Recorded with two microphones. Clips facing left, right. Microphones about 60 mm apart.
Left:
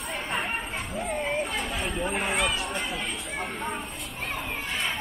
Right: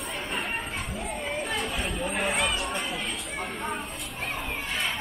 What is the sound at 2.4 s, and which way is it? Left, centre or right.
Speech, centre.